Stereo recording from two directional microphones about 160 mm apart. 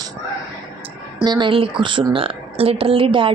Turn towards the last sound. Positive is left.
turn(degrees=-35)  # may be behind; listen again after turning